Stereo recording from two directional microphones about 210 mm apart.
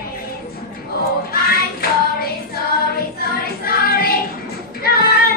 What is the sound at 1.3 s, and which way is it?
Hands, 45° left (ahead or behind).